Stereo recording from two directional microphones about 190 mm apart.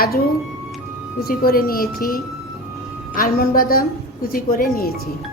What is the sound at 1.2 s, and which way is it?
A woman's voice, 50° left (ahead or behind).